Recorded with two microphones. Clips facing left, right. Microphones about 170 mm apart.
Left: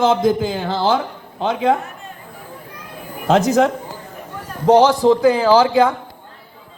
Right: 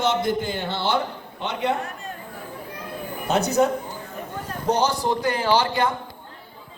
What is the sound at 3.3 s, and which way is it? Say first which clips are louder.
A woman's voice: left 6 dB; 90° left.